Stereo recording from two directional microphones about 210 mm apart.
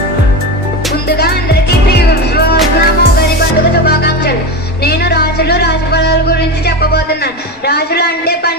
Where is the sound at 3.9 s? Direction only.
50° left (ahead or behind).